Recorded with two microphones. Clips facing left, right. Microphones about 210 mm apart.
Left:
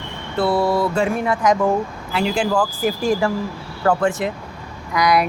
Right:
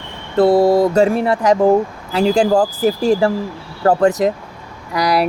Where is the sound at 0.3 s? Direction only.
40° right (ahead or behind).